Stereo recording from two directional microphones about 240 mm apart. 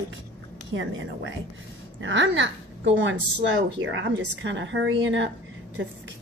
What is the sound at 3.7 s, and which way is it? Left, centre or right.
A woman's voice, right.